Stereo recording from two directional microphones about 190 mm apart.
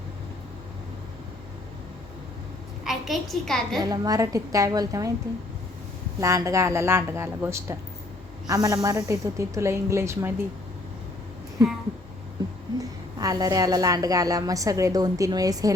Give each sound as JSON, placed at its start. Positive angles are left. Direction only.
{"t": 2.8, "sound": "a woman's voice", "side_deg": 0}
{"t": 3.8, "sound": "speech", "side_deg": -20}
{"t": 6.1, "sound": "speech", "side_deg": -15}
{"t": 12.8, "sound": "a woman's voice", "side_deg": -20}